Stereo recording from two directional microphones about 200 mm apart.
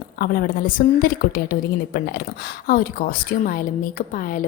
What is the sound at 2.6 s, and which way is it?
A woman's voice, 45° left (ahead or behind).